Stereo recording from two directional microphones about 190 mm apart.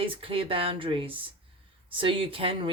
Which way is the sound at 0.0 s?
30° right (ahead or behind).